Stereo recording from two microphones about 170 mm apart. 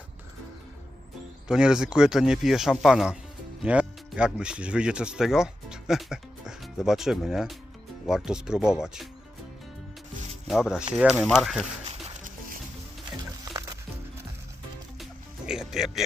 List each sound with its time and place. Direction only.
1.5 s speech: 5° right (ahead or behind)
10.4 s speech: 5° right (ahead or behind)
13.4 s music: 25° right (ahead or behind)
15.4 s music: 5° right (ahead or behind)